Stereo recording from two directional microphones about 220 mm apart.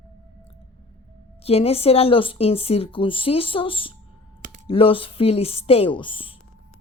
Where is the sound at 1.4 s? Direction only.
25° left (ahead or behind).